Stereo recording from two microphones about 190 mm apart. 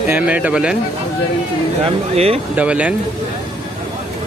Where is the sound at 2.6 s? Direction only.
5° right (ahead or behind).